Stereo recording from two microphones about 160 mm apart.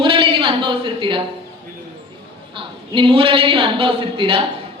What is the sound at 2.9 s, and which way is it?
Speech, 35° right (ahead or behind).